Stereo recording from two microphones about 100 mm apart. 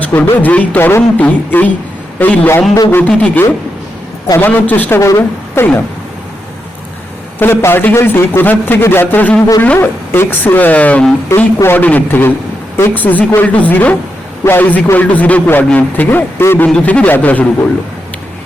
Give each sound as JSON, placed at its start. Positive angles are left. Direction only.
{"t": 0.0, "sound": "a man's voice", "side_deg": 20}
{"t": 4.9, "sound": "a woman's voice", "side_deg": 30}
{"t": 7.3, "sound": "a man's voice", "side_deg": 25}
{"t": 16.6, "sound": "a man's voice", "side_deg": 10}